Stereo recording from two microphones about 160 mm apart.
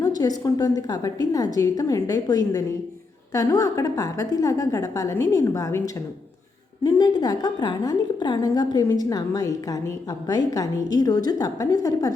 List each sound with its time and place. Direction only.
0.2 s a woman's voice: 25° left (ahead or behind)